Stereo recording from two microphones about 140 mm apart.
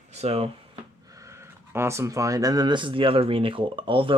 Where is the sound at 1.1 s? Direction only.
20° right (ahead or behind).